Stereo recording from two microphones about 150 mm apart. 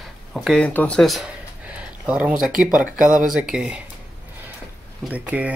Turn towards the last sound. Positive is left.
turn(degrees=-10)  # may be behind; listen again after turning